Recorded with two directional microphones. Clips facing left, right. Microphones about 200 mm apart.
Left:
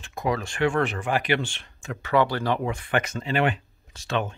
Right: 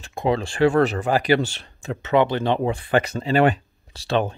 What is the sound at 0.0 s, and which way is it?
Speech, 30° right (ahead or behind).